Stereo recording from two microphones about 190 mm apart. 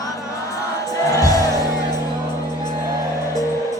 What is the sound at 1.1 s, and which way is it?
Music, 20° left (ahead or behind).